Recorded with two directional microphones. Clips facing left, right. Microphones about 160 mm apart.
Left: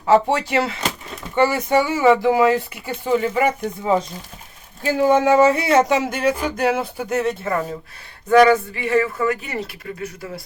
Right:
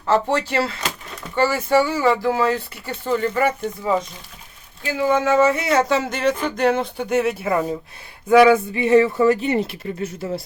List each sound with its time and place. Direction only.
0.0 s speech: 15° left (ahead or behind)
4.8 s speech: 45° left (ahead or behind)
5.8 s speech: 10° left (ahead or behind); by 8.6 s 10° right (ahead or behind)
8.7 s speech: 20° right (ahead or behind)